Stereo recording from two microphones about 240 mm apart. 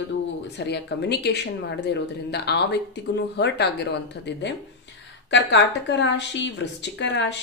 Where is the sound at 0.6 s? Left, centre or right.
Left.